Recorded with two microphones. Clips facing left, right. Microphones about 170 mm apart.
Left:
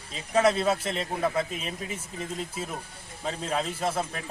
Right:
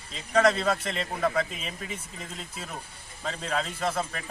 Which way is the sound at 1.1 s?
25° left (ahead or behind).